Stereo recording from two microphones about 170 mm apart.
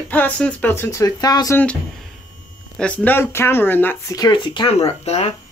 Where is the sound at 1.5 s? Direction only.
5° left (ahead or behind); by 5.3 s 40° left (ahead or behind).